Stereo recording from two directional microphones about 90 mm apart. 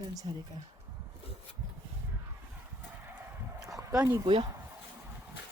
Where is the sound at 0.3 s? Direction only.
60° right (ahead or behind).